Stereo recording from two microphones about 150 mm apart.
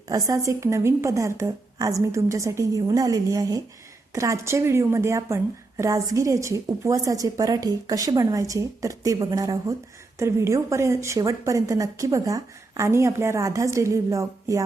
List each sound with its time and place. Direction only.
0.1 s a woman's voice: 20° right (ahead or behind)